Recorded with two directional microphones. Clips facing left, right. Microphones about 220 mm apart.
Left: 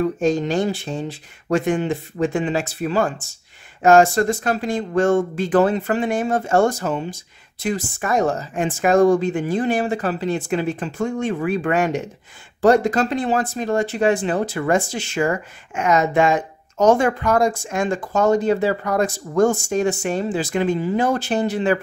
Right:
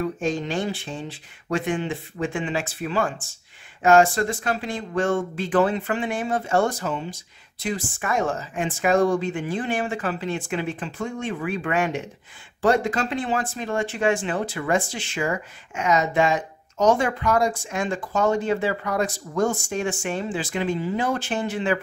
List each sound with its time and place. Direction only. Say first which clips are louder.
0.0 s speech: left 6 dB; 40° left (ahead or behind)